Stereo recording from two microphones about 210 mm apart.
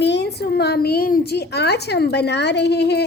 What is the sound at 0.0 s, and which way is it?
A woman's voice, 55° left (ahead or behind).